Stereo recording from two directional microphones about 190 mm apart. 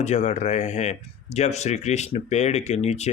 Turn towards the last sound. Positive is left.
turn(degrees=35)  # may be behind; listen again after turning